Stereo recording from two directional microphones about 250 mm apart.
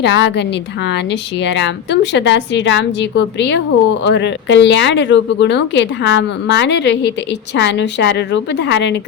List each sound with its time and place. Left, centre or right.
0.0 s speech: left